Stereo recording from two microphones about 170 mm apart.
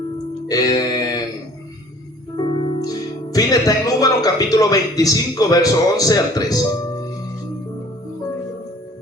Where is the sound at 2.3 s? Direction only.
30° left (ahead or behind).